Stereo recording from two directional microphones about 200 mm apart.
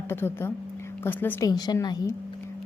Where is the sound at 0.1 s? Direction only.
10° left (ahead or behind).